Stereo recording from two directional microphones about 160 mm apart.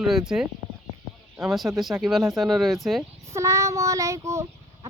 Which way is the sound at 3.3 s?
20° right (ahead or behind).